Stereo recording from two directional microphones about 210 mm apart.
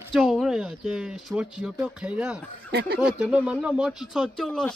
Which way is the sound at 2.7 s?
50° right (ahead or behind).